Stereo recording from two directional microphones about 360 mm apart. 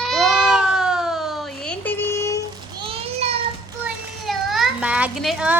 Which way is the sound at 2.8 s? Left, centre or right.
Centre.